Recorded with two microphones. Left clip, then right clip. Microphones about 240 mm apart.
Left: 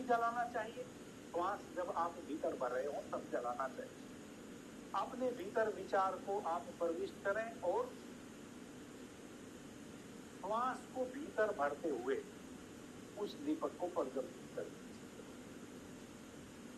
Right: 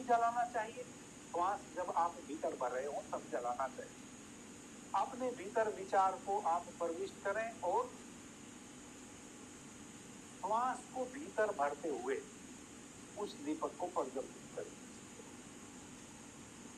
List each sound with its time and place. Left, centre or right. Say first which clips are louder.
0.1 s speech: right 3 dB; centre
4.9 s speech: right 2 dB; centre
10.4 s speech: right 3 dB; centre
13.2 s speech: left 1 dB; centre